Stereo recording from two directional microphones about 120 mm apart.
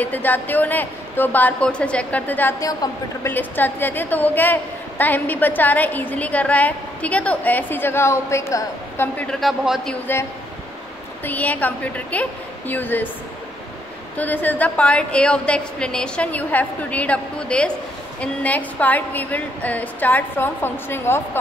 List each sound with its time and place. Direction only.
0.0 s a woman's voice: 15° left (ahead or behind)
2.8 s a woman's voice: 30° left (ahead or behind)
3.3 s a woman's voice: 15° left (ahead or behind)
9.3 s a man's voice: centre (ahead or behind)
11.2 s a woman's voice: 15° left (ahead or behind)
14.1 s a woman's voice: 15° left (ahead or behind)